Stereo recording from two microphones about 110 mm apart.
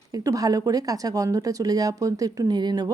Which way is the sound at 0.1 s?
35° right (ahead or behind).